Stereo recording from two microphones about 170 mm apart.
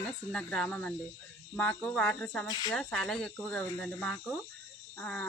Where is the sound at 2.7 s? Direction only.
5° left (ahead or behind).